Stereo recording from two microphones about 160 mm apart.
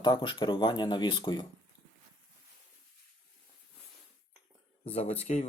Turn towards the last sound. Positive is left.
turn(degrees=40)  # may be behind; listen again after turning